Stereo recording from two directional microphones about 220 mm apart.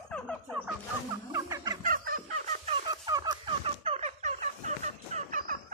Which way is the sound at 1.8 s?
40° right (ahead or behind).